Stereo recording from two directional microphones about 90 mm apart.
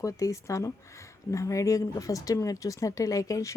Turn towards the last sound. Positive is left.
turn(degrees=35)  # may be behind; listen again after turning